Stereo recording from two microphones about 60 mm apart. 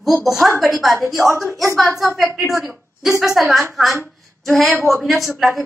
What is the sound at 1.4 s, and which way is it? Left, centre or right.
A woman's voice, centre.